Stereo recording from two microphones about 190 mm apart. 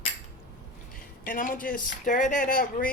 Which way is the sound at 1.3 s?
45° left (ahead or behind).